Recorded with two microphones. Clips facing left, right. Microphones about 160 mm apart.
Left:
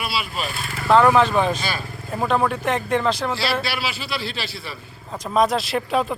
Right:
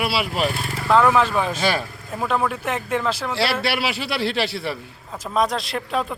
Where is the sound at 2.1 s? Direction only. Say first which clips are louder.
Left 2 dB; centre (ahead or behind).